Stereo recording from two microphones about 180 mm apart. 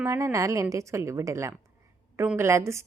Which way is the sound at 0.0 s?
15° right (ahead or behind).